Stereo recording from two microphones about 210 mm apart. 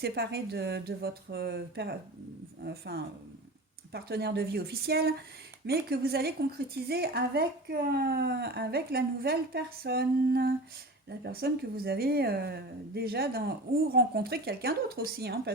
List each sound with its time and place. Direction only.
0.0 s a woman's voice: 50° right (ahead or behind)